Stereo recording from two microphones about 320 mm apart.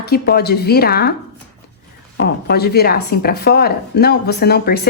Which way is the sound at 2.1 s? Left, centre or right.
Left.